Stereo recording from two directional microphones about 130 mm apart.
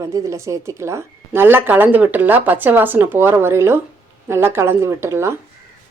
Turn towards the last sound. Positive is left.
turn(degrees=-20)  # may be behind; listen again after turning